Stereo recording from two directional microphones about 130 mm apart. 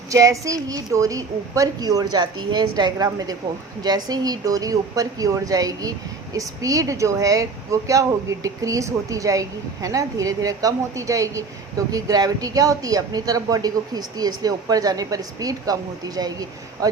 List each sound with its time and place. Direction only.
0.1 s speech: 25° right (ahead or behind)